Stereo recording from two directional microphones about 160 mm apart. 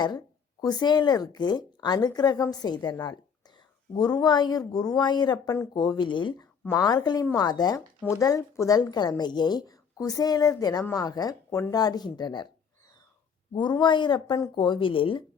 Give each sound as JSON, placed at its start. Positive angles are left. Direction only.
{"t": 0.6, "sound": "speech", "side_deg": 25}
{"t": 13.5, "sound": "speech", "side_deg": 30}